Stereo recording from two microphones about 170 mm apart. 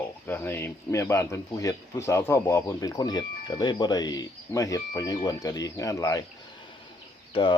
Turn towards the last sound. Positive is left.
turn(degrees=30)  # may be behind; listen again after turning